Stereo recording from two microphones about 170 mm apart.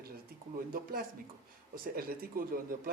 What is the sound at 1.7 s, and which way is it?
A woman's voice, 55° right (ahead or behind).